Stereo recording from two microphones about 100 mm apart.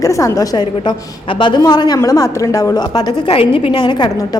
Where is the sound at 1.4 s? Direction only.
50° left (ahead or behind).